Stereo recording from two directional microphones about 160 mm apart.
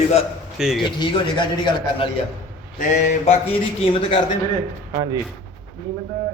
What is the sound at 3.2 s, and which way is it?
Speech, 35° left (ahead or behind).